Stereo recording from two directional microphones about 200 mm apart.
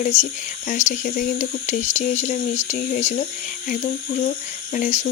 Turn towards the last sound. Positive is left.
turn(degrees=35)  # may be behind; listen again after turning